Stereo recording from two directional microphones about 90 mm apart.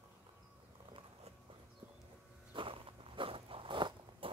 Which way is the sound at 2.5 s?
85° right.